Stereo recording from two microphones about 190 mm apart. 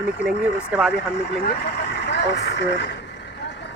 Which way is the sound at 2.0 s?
60° left (ahead or behind).